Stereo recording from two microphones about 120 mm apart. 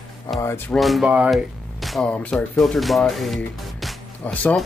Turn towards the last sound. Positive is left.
turn(degrees=0)  # may be behind; listen again after turning